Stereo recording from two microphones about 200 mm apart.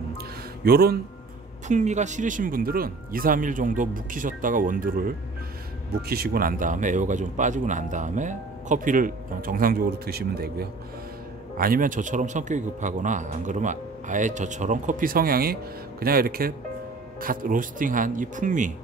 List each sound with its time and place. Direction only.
0.7 s speech: 50° right (ahead or behind)
1.7 s a man's voice: 35° right (ahead or behind)